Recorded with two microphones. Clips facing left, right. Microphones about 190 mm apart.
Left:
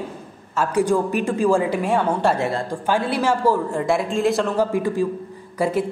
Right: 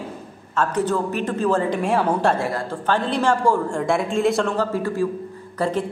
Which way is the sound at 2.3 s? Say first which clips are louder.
Left 1 dB; 20° left (ahead or behind).